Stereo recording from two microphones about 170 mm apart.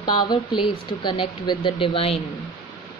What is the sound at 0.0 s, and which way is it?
A woman's voice, 25° left (ahead or behind).